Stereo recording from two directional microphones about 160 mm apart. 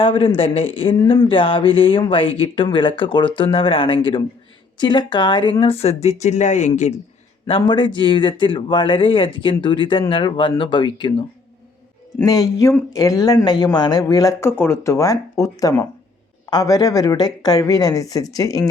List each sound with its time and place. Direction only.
0.0 s speech: 35° left (ahead or behind)
7.4 s speech: 30° left (ahead or behind)